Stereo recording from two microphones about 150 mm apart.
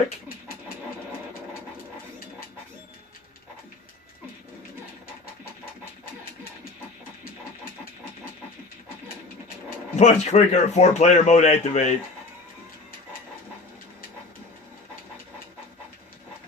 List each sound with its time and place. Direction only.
9.9 s a man's voice: 50° left (ahead or behind)